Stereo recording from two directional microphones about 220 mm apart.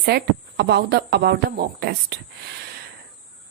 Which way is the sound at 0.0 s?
50° right (ahead or behind).